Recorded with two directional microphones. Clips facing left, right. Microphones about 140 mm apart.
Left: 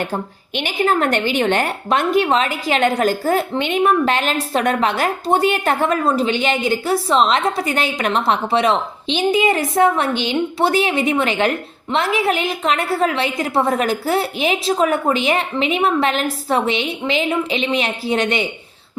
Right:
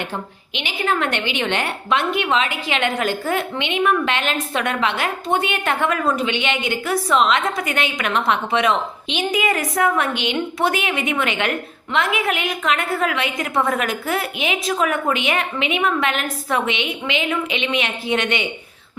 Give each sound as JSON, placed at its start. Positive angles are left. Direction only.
{"t": 0.0, "sound": "a woman's voice", "side_deg": 45}